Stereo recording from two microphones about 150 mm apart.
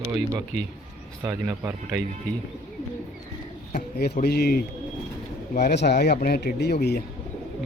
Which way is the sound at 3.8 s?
90° left.